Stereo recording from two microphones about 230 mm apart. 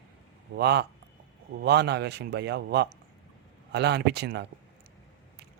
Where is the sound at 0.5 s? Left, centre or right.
Right.